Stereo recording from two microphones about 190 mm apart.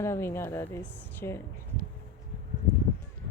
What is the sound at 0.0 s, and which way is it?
Speech, 15° left (ahead or behind).